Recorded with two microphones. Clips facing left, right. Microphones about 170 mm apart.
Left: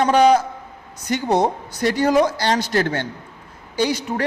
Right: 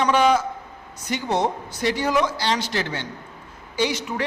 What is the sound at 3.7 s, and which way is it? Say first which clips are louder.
Speech: left 3 dB; 40° left (ahead or behind).